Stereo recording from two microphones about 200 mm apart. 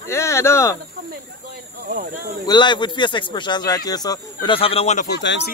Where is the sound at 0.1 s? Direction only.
15° left (ahead or behind).